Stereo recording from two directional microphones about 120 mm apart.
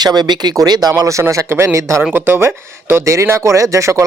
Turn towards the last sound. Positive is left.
turn(degrees=-25)  # may be behind; listen again after turning